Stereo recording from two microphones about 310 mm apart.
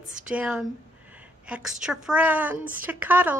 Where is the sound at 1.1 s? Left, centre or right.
Centre.